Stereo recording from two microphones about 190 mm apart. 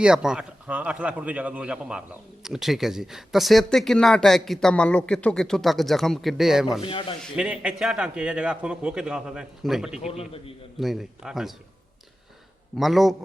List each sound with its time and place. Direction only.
0.0 s a man's voice: 5° right (ahead or behind)
10.0 s a man's voice: 30° left (ahead or behind)
10.8 s a man's voice: centre (ahead or behind)
12.7 s a man's voice: centre (ahead or behind)